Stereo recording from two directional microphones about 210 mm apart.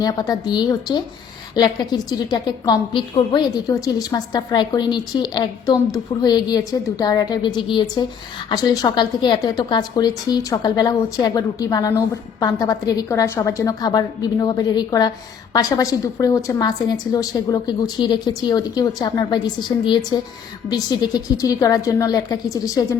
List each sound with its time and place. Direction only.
0.0 s a woman's voice: 20° left (ahead or behind)